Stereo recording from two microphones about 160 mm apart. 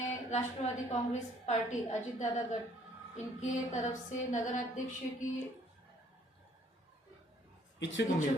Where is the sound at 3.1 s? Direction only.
45° left (ahead or behind).